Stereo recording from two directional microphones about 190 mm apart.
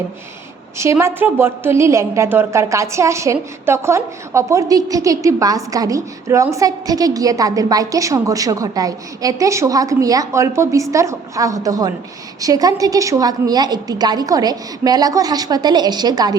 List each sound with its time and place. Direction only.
0.8 s a woman's voice: 15° right (ahead or behind)